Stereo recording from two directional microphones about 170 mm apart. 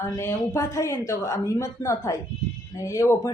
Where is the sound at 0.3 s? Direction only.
15° left (ahead or behind).